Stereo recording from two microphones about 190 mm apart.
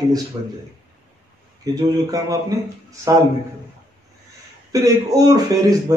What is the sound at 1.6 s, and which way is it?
Speech, 20° right (ahead or behind).